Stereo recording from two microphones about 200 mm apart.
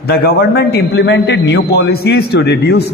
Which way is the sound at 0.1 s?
50° left (ahead or behind).